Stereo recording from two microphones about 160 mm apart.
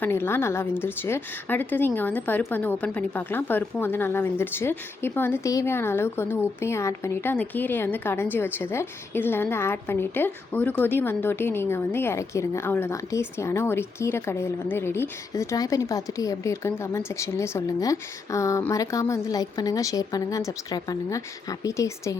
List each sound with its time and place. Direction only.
0.0 s a woman's voice: 15° left (ahead or behind)